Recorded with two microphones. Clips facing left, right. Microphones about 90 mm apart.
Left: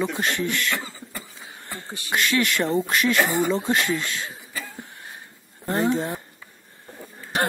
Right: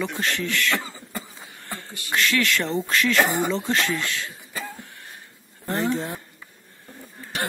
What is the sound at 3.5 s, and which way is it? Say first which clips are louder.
Speech: left 1 dB; 15° left (ahead or behind).